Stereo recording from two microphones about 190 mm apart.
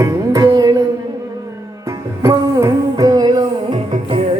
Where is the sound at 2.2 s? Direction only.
15° right (ahead or behind).